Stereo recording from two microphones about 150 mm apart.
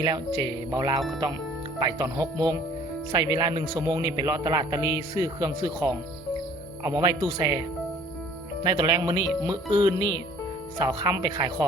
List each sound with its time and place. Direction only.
0.0 s speech: 25° right (ahead or behind)
8.6 s speech: 25° right (ahead or behind)